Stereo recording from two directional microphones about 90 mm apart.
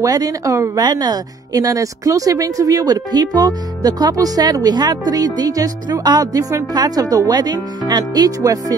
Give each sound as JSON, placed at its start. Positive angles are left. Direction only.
{"t": 0.0, "sound": "speech", "side_deg": -40}